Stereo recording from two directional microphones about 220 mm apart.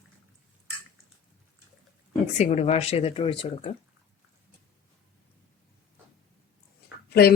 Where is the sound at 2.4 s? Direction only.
30° left (ahead or behind).